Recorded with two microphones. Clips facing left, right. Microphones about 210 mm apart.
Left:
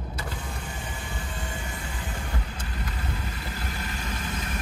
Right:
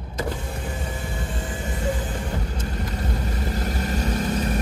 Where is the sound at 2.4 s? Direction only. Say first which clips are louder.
Right 7 dB; 40° right (ahead or behind).